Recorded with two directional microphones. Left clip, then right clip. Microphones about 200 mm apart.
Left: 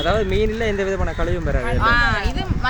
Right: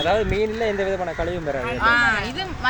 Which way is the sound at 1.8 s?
5° right (ahead or behind).